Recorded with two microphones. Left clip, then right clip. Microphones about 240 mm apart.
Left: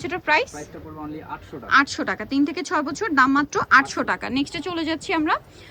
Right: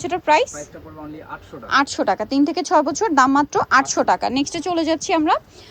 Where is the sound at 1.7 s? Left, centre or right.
Centre.